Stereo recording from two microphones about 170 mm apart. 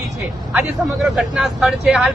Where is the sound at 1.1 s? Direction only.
5° right (ahead or behind).